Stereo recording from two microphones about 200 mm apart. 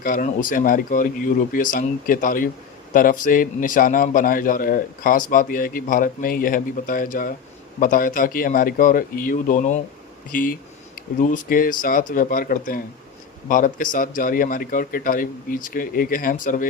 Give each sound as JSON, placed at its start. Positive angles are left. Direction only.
{"t": 0.0, "sound": "a man's voice", "side_deg": 45}